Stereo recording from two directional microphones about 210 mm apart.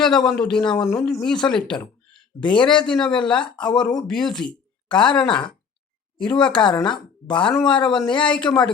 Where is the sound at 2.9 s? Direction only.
5° left (ahead or behind).